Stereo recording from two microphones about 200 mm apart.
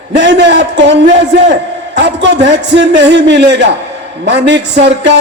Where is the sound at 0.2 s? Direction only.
60° right (ahead or behind).